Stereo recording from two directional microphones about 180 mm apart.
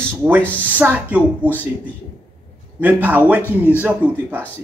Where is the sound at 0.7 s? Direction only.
10° right (ahead or behind).